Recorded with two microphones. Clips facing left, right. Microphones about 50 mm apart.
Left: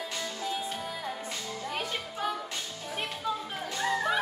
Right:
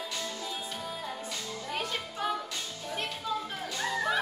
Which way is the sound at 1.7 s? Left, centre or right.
Centre.